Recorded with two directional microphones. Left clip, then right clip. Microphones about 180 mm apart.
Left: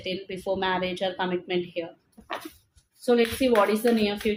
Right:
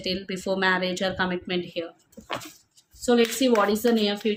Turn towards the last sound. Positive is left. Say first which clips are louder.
# right 1 dB
turn(degrees=-40)  # may be behind; listen again after turning